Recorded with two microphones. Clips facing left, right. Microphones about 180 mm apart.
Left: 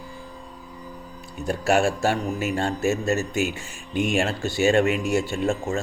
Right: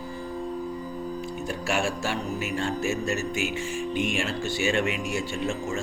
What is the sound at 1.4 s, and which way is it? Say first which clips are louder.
A man's voice: left 8 dB; 40° left (ahead or behind).